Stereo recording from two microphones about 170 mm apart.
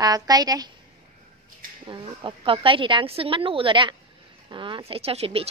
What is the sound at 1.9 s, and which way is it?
A woman's voice, 30° right (ahead or behind).